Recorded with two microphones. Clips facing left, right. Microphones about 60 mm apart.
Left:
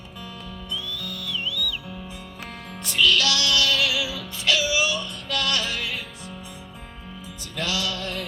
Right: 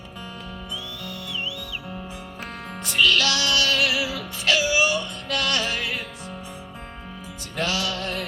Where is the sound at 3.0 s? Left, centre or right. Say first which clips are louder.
Left 1 dB; right.